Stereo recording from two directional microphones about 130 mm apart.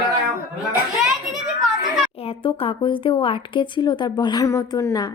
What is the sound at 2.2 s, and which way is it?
A woman's voice, 45° left (ahead or behind).